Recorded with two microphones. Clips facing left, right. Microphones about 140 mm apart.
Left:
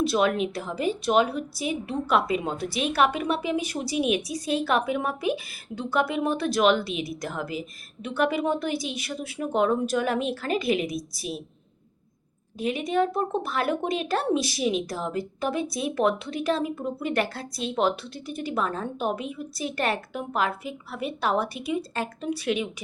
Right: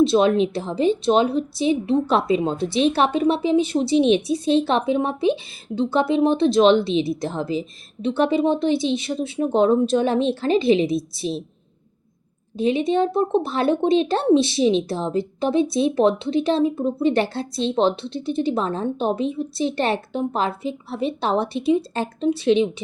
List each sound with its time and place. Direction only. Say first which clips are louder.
0.0 s a woman's voice: right 7 dB; 25° right (ahead or behind)
12.5 s a woman's voice: right 6 dB; 25° right (ahead or behind)